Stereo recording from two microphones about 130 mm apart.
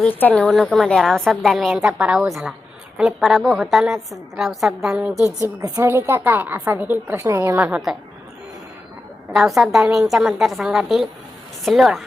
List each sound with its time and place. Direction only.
0.0 s a woman's voice: 15° left (ahead or behind); by 5.2 s 5° right (ahead or behind)
5.6 s a woman's voice: 25° right (ahead or behind)
7.6 s a woman's voice: 5° right (ahead or behind)
9.3 s a woman's voice: 5° right (ahead or behind)